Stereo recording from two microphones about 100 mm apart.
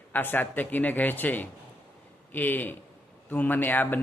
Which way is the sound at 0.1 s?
20° left (ahead or behind).